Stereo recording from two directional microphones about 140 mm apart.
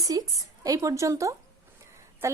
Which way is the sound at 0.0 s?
25° right (ahead or behind).